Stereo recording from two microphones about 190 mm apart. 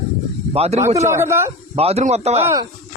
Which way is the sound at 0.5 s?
35° right (ahead or behind).